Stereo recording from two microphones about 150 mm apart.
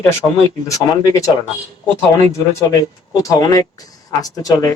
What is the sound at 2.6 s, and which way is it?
Speech, 25° left (ahead or behind).